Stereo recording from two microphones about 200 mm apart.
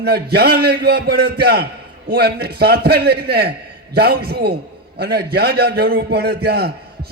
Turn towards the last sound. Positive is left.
turn(degrees=-50)  # may be behind; listen again after turning